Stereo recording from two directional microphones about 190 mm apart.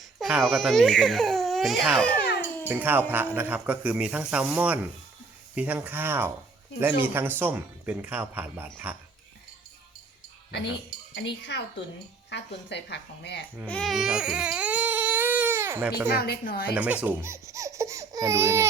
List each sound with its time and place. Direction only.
0.0 s speech: centre (ahead or behind)
2.6 s speech: 10° right (ahead or behind)
11.1 s speech: 70° left (ahead or behind)
13.7 s baby cry: 5° left (ahead or behind)
16.1 s speech: 55° left (ahead or behind)
16.7 s speech: 5° right (ahead or behind)